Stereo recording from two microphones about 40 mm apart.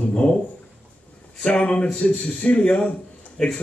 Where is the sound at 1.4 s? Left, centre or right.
Left.